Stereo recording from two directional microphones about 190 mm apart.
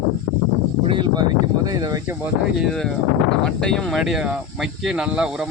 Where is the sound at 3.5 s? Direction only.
5° left (ahead or behind).